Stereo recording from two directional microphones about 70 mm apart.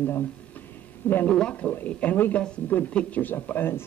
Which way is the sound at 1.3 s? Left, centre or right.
Centre.